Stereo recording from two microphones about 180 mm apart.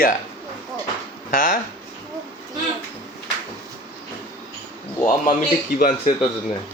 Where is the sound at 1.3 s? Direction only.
50° left (ahead or behind).